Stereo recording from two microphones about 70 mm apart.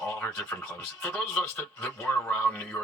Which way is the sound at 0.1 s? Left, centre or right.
Left.